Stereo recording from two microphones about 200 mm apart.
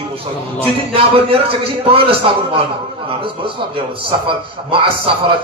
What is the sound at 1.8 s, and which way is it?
A man's voice, 25° right (ahead or behind).